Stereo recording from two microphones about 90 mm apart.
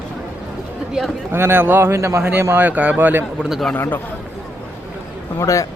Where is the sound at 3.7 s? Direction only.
20° left (ahead or behind).